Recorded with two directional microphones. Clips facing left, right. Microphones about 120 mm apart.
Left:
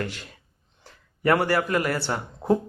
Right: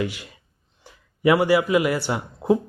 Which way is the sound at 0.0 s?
10° right (ahead or behind).